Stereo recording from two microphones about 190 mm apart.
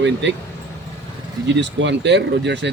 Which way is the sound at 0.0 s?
70° right (ahead or behind).